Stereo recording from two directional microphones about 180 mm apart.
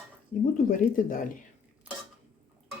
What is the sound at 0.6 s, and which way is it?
Speech, 50° left (ahead or behind).